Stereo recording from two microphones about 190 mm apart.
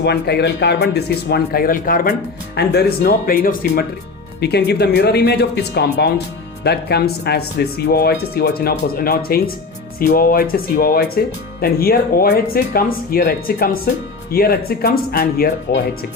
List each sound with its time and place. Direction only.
0.0 s speech: 60° left (ahead or behind)
2.6 s speech: 60° left (ahead or behind)